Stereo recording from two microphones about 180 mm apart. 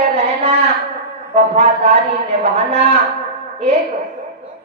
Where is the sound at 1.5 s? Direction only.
35° right (ahead or behind).